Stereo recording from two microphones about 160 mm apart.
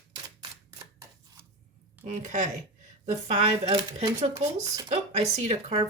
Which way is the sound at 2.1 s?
50° right (ahead or behind).